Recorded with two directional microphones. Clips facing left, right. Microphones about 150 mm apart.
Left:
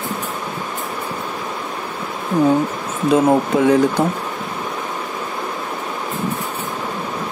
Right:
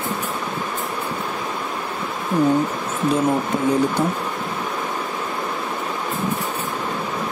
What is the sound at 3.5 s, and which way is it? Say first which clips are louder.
Speech: left 6 dB; 90° left.